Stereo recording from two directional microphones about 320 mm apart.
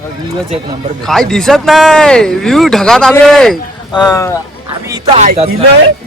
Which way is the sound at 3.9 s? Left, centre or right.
Centre.